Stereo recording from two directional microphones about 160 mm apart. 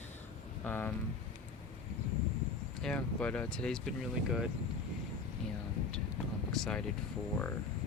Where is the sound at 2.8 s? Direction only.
5° left (ahead or behind).